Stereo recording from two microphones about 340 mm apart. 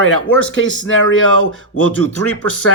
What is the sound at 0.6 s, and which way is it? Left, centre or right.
A man's voice, left.